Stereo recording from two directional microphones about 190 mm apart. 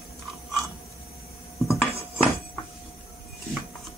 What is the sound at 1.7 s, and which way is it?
Dishes, centre (ahead or behind).